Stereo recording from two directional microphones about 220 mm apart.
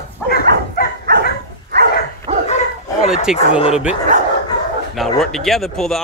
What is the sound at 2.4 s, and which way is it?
Bow-wow, 30° left (ahead or behind).